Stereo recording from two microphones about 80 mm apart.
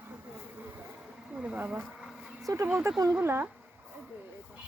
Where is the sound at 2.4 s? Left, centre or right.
Right.